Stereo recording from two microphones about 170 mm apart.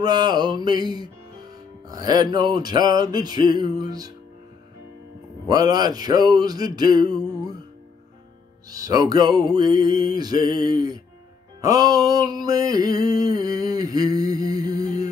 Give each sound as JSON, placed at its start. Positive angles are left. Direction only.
{"t": 0.0, "sound": "music", "side_deg": -25}
{"t": 5.5, "sound": "music", "side_deg": -25}
{"t": 8.6, "sound": "music", "side_deg": -20}
{"t": 11.6, "sound": "a sound", "side_deg": -20}